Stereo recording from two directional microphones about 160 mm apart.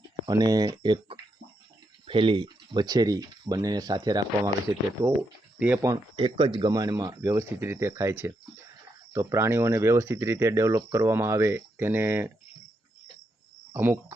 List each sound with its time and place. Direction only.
0.3 s speech: 25° right (ahead or behind)
5.5 s speech: 10° right (ahead or behind)
5.8 s speech: 20° right (ahead or behind)
6.2 s speech: 30° right (ahead or behind); by 12.3 s 15° right (ahead or behind)
13.7 s speech: 15° right (ahead or behind)